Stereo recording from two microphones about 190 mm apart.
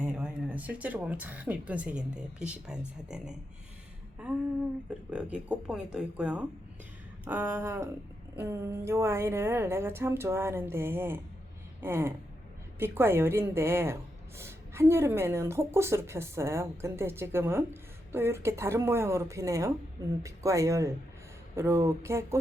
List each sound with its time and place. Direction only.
0.0 s a woman's voice: 5° right (ahead or behind)